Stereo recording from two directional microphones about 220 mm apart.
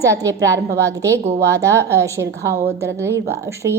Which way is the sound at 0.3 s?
55° right (ahead or behind).